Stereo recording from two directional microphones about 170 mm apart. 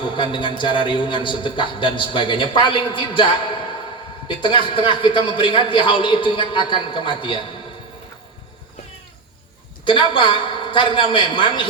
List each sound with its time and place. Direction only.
0.0 s a man's voice: 30° left (ahead or behind)
9.8 s a man's voice: 30° left (ahead or behind)